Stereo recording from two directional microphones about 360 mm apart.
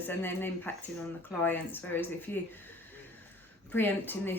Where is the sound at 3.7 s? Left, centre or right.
Centre.